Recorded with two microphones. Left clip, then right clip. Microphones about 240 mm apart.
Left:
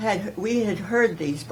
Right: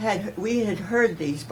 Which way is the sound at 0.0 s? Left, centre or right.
Centre.